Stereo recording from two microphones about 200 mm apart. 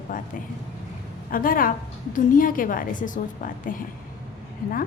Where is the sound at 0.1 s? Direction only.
40° left (ahead or behind).